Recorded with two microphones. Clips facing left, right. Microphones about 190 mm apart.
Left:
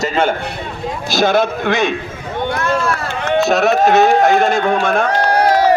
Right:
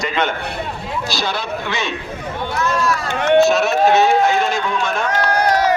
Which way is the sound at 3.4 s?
60° left (ahead or behind).